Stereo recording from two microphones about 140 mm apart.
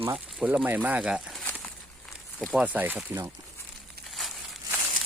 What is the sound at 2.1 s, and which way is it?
Walk, 15° left (ahead or behind).